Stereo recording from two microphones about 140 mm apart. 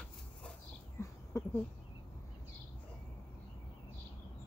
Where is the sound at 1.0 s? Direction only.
20° left (ahead or behind).